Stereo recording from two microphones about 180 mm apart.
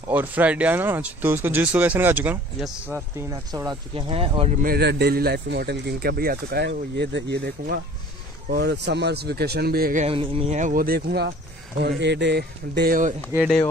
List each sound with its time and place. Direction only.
0.1 s speech: 10° right (ahead or behind)
3.2 s speech: 20° right (ahead or behind)
3.9 s speech: 30° right (ahead or behind)
4.6 s speech: 60° right (ahead or behind)
8.5 s speech: 70° right (ahead or behind); by 10.0 s 55° right (ahead or behind)
10.0 s speech: 30° right (ahead or behind); by 11.3 s 65° right (ahead or behind)
11.8 s speech: 75° right (ahead or behind); by 13.1 s 55° right (ahead or behind)